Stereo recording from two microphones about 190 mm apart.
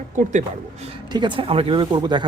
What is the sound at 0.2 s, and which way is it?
Speech, 40° right (ahead or behind).